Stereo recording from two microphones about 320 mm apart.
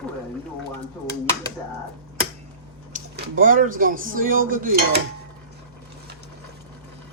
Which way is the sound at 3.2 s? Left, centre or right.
Right.